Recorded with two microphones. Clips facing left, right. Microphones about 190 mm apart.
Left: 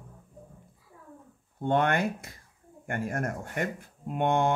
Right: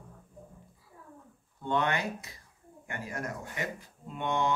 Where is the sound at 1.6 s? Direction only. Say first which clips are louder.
Left 5 dB; 50° left (ahead or behind).